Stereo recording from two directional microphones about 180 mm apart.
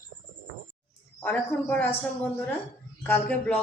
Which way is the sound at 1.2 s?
10° left (ahead or behind).